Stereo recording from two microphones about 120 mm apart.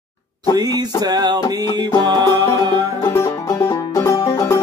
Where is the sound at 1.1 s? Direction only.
35° right (ahead or behind).